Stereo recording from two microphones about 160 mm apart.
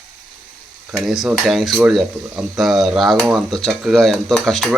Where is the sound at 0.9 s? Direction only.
Centre (ahead or behind).